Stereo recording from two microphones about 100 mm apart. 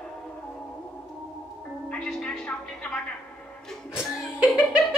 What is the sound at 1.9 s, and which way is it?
A woman's voice, 5° left (ahead or behind).